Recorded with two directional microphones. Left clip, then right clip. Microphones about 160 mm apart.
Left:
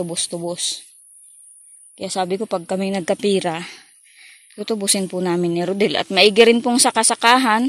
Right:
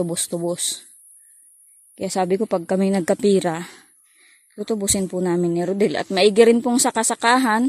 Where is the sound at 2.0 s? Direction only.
40° right (ahead or behind).